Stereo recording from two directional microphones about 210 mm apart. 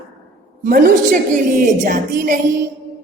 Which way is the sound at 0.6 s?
40° right (ahead or behind).